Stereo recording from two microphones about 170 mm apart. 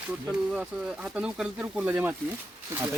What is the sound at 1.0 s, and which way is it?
Speech, 5° right (ahead or behind).